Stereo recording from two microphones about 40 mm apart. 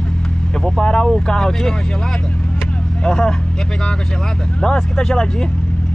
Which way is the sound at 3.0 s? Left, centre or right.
Left.